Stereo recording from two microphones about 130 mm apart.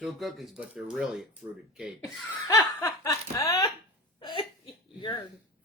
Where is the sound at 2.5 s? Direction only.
30° left (ahead or behind).